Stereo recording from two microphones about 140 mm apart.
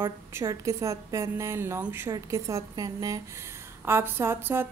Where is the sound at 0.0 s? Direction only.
20° right (ahead or behind).